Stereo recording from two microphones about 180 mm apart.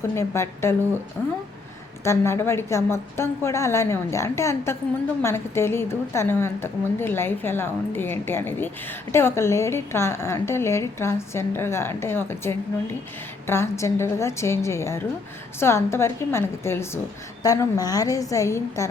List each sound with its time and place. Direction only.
0.0 s a woman's voice: 15° left (ahead or behind)
2.0 s a woman's voice: 15° left (ahead or behind)